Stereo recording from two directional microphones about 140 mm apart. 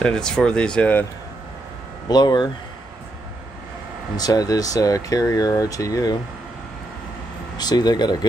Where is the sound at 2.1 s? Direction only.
30° left (ahead or behind).